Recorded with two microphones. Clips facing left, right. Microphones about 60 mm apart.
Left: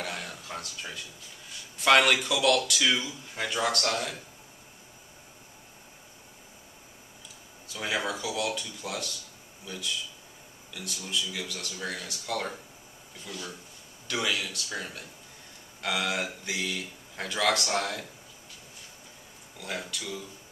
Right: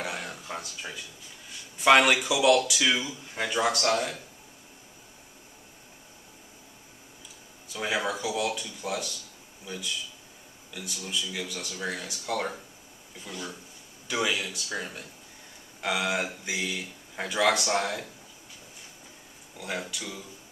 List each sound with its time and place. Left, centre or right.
0.0 s a sound: centre
1.8 s speech: centre
7.6 s speech: centre
19.6 s speech: centre